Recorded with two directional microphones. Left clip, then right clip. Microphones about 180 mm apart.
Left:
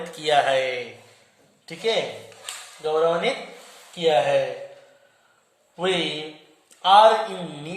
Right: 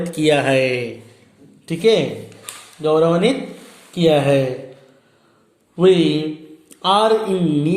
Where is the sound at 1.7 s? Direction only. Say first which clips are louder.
Right 8 dB; 40° right (ahead or behind).